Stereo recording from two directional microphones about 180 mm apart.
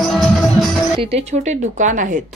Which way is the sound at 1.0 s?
35° right (ahead or behind).